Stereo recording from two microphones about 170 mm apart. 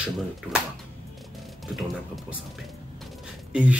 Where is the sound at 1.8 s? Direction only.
Centre (ahead or behind).